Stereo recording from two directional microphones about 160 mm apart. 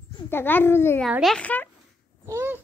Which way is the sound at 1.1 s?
Centre (ahead or behind).